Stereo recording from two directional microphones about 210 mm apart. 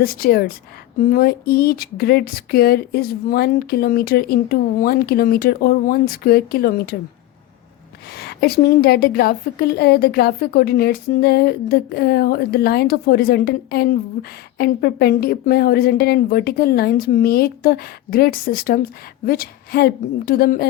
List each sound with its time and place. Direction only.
0.0 s a woman's voice: 45° left (ahead or behind)
8.1 s a woman's voice: 50° left (ahead or behind)